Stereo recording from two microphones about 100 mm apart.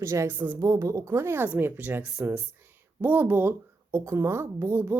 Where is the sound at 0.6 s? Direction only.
30° right (ahead or behind).